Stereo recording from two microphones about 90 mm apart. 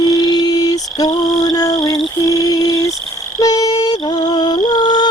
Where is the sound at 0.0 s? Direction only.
50° left (ahead or behind).